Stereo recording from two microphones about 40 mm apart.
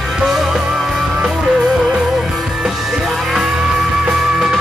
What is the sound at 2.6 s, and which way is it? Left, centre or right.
Music, centre.